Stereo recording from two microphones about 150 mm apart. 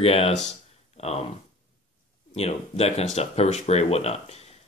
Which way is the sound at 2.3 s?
45° left (ahead or behind).